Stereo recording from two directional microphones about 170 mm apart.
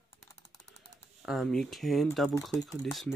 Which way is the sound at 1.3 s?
Centre (ahead or behind).